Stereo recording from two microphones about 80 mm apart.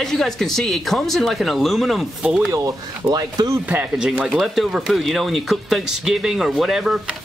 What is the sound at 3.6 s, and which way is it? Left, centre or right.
Speech, centre.